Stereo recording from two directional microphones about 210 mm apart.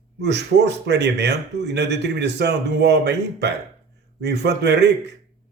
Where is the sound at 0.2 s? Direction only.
55° right (ahead or behind).